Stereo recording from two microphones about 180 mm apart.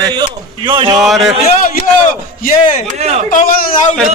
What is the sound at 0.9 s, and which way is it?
Speech, centre (ahead or behind).